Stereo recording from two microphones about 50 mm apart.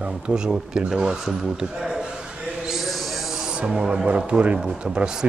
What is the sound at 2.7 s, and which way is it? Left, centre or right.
Owl, centre.